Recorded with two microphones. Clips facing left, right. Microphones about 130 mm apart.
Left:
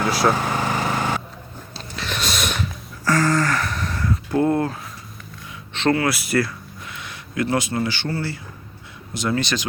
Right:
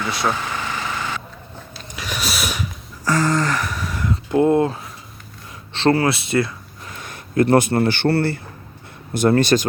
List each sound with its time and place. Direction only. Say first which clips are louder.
0.1 s speech: left 3 dB; centre (ahead or behind)
0.3 s vehicle: left 4 dB; 45° left (ahead or behind)
2.0 s a sound: even; 10° right (ahead or behind)
4.1 s speech: right 4 dB; 20° right (ahead or behind)
5.7 s speech: right 3 dB; 30° right (ahead or behind)
6.8 s speech: right 3 dB; 45° right (ahead or behind)